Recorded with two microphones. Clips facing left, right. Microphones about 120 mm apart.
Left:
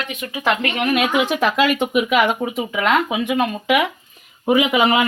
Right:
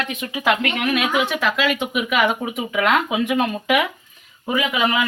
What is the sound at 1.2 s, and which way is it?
Speech, 40° left (ahead or behind).